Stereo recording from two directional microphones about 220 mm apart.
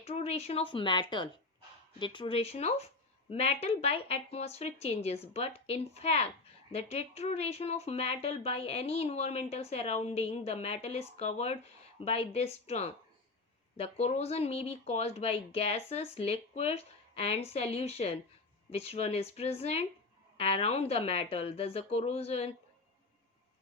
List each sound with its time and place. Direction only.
0.0 s speech: 25° left (ahead or behind)